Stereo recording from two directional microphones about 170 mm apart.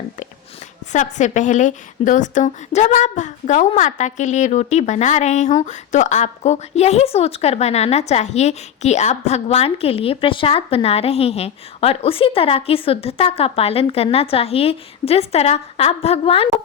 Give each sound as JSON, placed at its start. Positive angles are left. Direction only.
{"t": 0.9, "sound": "a woman's voice", "side_deg": 45}